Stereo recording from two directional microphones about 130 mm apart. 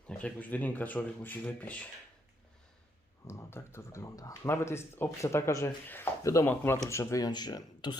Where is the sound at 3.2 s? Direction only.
20° left (ahead or behind).